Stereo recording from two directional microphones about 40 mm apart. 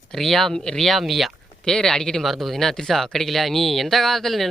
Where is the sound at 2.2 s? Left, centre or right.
Centre.